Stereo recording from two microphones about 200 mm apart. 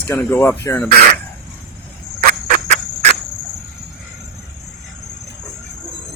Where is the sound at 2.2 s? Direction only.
40° right (ahead or behind).